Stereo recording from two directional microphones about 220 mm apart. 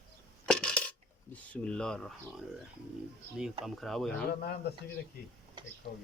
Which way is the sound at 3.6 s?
Centre (ahead or behind).